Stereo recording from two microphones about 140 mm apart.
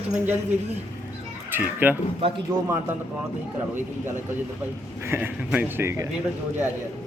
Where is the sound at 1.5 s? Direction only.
15° right (ahead or behind).